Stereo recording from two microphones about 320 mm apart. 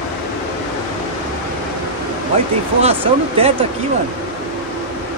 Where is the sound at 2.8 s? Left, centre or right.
Centre.